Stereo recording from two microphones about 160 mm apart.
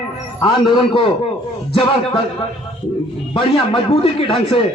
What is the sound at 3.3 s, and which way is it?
A man's voice, 35° left (ahead or behind).